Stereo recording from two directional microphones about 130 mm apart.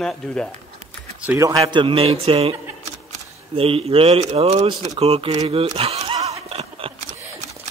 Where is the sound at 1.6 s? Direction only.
40° right (ahead or behind).